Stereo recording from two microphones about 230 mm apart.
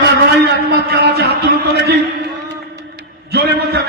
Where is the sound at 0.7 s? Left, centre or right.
Right.